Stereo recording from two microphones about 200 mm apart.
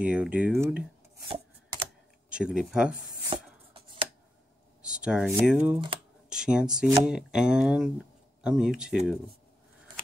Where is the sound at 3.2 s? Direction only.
25° right (ahead or behind).